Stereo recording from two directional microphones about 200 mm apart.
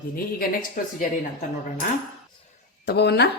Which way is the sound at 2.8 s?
55° left (ahead or behind).